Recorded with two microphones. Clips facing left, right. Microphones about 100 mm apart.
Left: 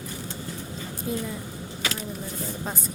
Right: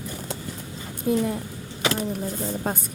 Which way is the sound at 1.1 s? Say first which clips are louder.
Right 8 dB; 55° right (ahead or behind).